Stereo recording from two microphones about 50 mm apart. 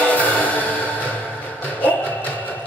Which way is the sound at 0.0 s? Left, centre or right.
Left.